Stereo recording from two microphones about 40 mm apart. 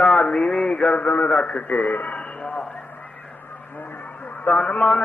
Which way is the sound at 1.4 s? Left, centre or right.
Left.